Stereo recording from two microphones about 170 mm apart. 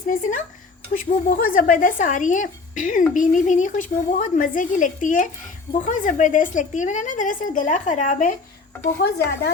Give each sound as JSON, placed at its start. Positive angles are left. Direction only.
{"t": 0.1, "sound": "a woman's voice", "side_deg": 50}
{"t": 9.0, "sound": "speech", "side_deg": 70}